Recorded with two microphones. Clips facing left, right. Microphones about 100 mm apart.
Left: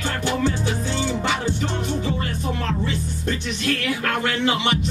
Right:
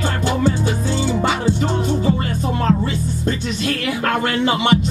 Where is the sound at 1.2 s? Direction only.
35° right (ahead or behind).